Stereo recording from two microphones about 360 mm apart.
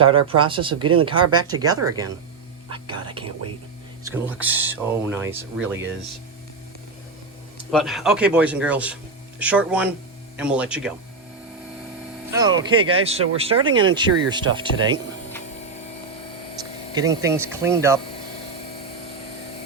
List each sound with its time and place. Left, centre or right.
0.3 s speech: centre
0.8 s speech: right
1.0 s speech: centre
7.7 s speech: centre
12.3 s speech: centre
16.9 s speech: centre